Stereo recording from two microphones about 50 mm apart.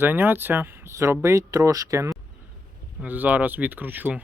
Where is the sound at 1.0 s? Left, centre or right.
Right.